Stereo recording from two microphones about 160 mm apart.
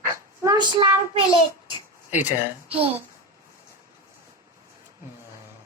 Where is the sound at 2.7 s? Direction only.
35° right (ahead or behind).